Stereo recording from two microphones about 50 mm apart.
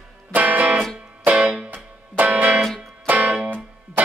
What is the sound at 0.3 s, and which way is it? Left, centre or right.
Music, right.